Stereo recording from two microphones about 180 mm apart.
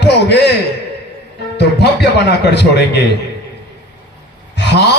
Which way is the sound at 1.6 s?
70° left (ahead or behind).